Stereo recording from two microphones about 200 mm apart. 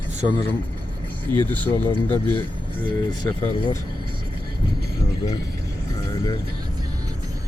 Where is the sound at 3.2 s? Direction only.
20° left (ahead or behind).